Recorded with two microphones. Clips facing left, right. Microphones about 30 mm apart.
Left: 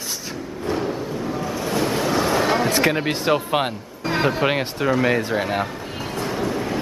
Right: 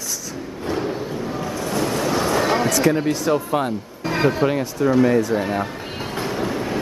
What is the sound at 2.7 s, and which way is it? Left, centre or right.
Speech, left.